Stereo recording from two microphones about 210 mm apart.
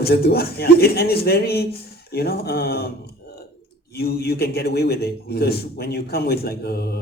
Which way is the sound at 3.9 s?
45° left (ahead or behind).